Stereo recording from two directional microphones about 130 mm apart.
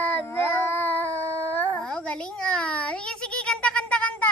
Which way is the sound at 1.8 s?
5° left (ahead or behind).